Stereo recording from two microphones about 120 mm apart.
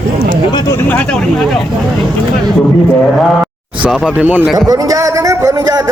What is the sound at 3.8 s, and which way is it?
Speech, 5° right (ahead or behind).